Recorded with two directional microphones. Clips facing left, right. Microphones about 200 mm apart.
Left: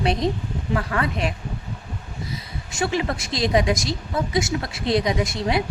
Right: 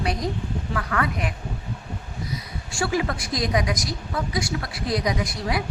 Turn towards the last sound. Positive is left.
turn(degrees=25)  # may be behind; listen again after turning